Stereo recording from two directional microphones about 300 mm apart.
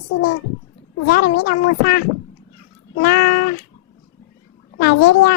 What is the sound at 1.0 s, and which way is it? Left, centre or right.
Speech, left.